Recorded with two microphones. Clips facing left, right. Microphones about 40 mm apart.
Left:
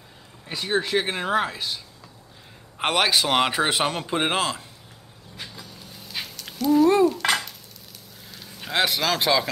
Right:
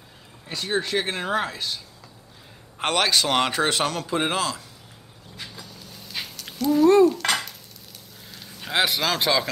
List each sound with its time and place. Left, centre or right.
0.5 s a man's voice: centre
2.8 s a man's voice: centre; by 4.6 s left
5.4 s dog: centre
8.3 s a man's voice: centre